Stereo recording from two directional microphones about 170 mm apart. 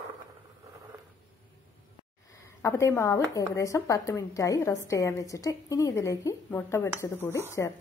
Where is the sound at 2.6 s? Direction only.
15° left (ahead or behind).